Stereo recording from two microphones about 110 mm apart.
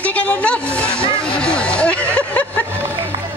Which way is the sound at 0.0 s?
15° left (ahead or behind).